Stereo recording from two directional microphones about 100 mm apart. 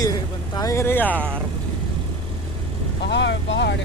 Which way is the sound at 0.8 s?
20° left (ahead or behind).